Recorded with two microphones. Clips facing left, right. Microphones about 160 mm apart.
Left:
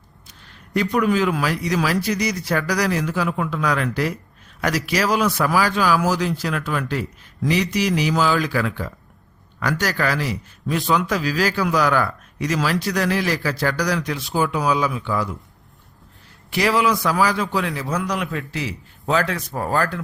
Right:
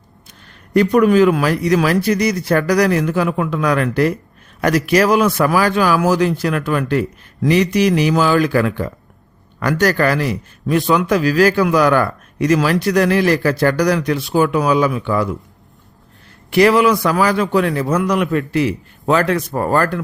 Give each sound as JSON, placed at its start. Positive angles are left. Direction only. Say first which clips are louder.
{"t": 0.3, "sound": "a man's voice", "louder": "right 2 dB", "side_deg": -50}
{"t": 16.5, "sound": "a man's voice", "louder": "right 7 dB", "side_deg": -60}